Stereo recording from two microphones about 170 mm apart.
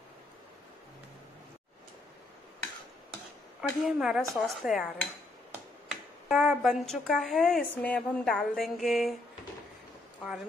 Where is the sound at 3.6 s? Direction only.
5° right (ahead or behind).